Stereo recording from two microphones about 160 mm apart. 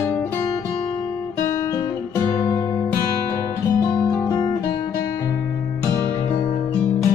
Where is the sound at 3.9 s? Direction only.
20° left (ahead or behind).